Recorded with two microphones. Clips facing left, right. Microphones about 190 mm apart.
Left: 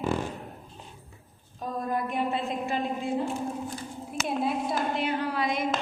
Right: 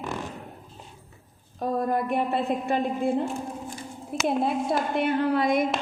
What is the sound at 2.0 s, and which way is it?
A woman's voice, 55° right (ahead or behind).